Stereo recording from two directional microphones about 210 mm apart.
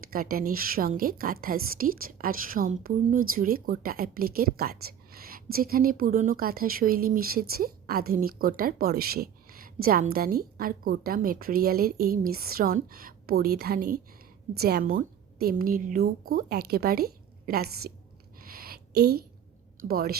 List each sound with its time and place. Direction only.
0.1 s a woman's voice: 45° right (ahead or behind)
18.3 s a sound: 45° right (ahead or behind)
19.9 s a woman's voice: 45° right (ahead or behind)